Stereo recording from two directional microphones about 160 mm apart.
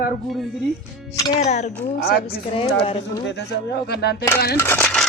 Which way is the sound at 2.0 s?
75° left (ahead or behind).